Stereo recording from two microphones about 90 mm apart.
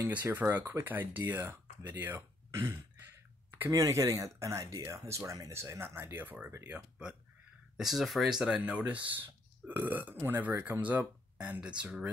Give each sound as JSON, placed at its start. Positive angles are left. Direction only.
{"t": 0.1, "sound": "speech", "side_deg": -20}
{"t": 7.7, "sound": "speech", "side_deg": -5}